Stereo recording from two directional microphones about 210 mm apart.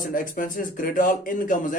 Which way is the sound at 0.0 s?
40° left (ahead or behind).